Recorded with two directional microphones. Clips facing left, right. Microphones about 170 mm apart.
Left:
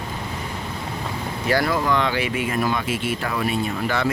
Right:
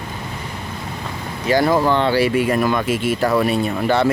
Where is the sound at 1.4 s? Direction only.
20° right (ahead or behind).